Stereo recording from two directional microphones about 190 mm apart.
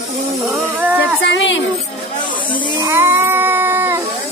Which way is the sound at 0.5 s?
10° right (ahead or behind).